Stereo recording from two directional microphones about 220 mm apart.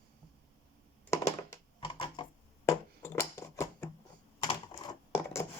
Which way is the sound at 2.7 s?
15° left (ahead or behind).